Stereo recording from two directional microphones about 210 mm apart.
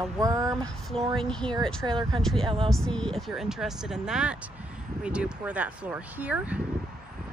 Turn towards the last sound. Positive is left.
turn(degrees=-5)  # may be behind; listen again after turning